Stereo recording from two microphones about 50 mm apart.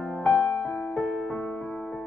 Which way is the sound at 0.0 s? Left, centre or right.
Left.